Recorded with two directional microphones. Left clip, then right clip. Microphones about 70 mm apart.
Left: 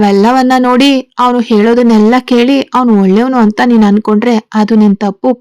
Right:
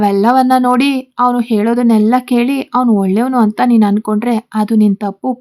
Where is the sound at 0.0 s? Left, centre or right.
Left.